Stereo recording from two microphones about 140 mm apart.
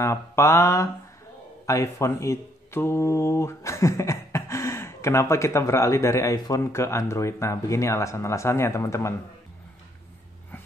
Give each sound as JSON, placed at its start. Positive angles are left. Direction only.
{"t": 0.0, "sound": "speech", "side_deg": 20}